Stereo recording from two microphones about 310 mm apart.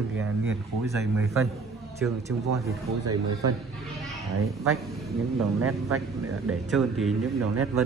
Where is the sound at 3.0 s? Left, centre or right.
Right.